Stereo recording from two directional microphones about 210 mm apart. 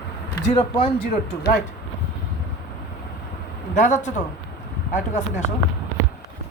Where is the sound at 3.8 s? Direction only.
35° left (ahead or behind).